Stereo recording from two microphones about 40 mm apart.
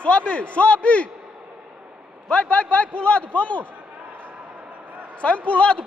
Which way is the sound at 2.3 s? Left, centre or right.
Left.